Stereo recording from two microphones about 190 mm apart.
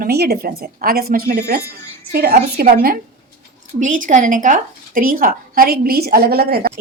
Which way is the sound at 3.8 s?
40° right (ahead or behind).